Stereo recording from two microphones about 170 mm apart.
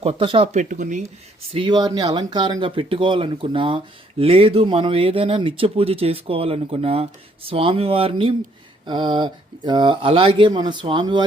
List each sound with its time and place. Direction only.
0.0 s speech: 35° right (ahead or behind)
0.6 s speech: 50° right (ahead or behind)
1.5 s speech: 30° right (ahead or behind)